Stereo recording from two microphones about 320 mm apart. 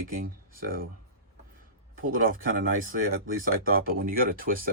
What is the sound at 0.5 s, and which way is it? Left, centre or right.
Speech, right.